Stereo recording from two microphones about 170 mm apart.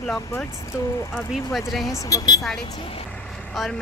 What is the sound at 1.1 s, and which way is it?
Speech, centre (ahead or behind).